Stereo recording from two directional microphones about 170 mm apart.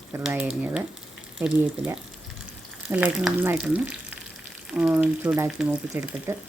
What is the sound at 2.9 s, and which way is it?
Speech, 5° right (ahead or behind).